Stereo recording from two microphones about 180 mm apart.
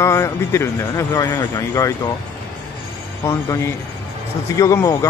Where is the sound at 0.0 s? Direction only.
15° left (ahead or behind).